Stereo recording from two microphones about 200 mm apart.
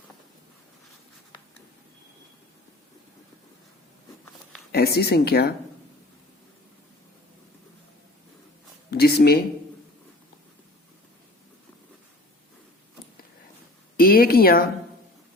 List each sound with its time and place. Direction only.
4.7 s speech: 55° left (ahead or behind)
8.9 s a sound: 50° left (ahead or behind)
13.9 s speech: 50° left (ahead or behind)